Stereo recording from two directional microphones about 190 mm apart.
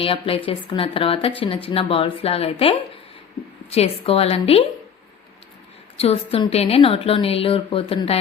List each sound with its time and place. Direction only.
0.0 s a woman's voice: 30° left (ahead or behind)
6.0 s a woman's voice: 30° left (ahead or behind)